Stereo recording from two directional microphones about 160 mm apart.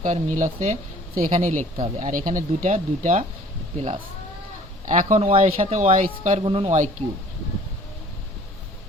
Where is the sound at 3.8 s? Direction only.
35° right (ahead or behind).